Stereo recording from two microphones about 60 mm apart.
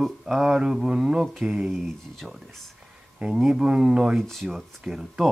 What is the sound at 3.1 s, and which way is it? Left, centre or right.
Speech, centre.